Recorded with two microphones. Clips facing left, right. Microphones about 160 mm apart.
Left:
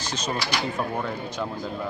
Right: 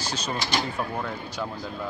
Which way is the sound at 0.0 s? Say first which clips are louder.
Left 1 dB; 25° right (ahead or behind).